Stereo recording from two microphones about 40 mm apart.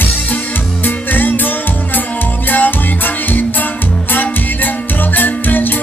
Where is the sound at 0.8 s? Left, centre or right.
Left.